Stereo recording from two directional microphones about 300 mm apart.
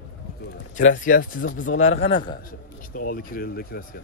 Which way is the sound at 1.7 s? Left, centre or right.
Left.